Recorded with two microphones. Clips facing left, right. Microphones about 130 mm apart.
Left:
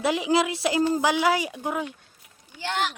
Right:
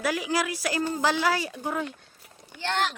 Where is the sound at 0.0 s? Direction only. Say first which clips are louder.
Left 4 dB; 20° left (ahead or behind).